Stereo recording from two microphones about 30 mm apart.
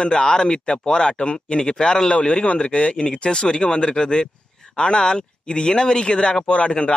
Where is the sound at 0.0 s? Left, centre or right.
Left.